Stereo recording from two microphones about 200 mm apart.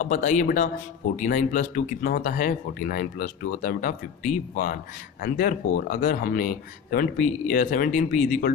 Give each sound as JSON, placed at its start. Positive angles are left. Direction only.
{"t": 0.0, "sound": "speech", "side_deg": 40}